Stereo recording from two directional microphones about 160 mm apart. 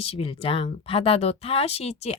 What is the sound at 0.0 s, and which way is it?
Speech, 35° left (ahead or behind).